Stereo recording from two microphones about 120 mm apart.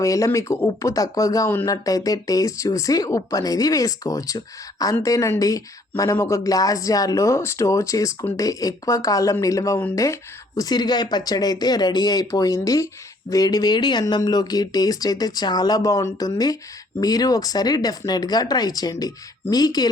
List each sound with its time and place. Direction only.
0.0 s speech: 25° left (ahead or behind)